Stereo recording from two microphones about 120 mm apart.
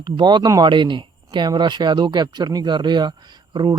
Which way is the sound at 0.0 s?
40° right (ahead or behind).